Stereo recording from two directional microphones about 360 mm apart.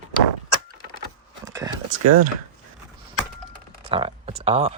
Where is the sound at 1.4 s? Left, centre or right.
Centre.